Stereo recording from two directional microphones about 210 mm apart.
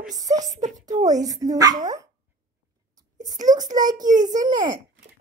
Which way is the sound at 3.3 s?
35° right (ahead or behind).